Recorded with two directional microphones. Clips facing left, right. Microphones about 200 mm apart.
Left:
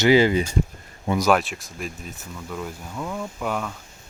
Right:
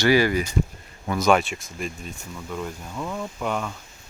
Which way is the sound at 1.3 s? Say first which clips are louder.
Right 3 dB; centre (ahead or behind).